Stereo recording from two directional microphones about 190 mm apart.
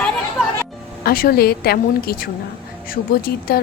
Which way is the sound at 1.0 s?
50° left (ahead or behind).